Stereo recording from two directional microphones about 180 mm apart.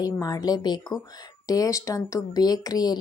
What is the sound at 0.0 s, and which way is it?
Speech, 20° left (ahead or behind).